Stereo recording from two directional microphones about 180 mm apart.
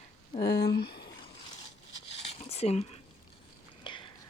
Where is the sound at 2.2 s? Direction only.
35° left (ahead or behind).